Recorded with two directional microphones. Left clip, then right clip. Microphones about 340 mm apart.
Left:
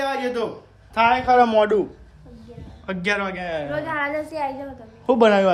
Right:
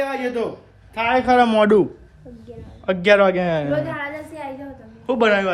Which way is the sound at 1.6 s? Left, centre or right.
Centre.